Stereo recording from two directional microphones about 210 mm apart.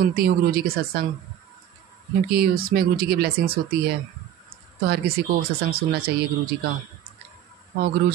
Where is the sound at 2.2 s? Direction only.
45° right (ahead or behind).